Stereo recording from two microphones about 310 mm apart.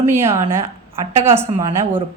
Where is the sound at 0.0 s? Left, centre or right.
Centre.